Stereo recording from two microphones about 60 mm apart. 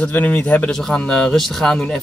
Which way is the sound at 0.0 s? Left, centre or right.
Left.